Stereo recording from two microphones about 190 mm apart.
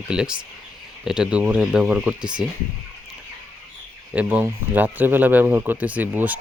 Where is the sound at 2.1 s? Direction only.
25° right (ahead or behind).